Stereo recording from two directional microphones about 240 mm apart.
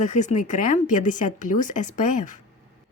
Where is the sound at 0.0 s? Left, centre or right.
Left.